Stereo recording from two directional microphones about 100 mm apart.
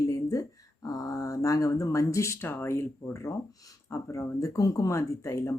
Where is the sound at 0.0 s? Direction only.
30° left (ahead or behind).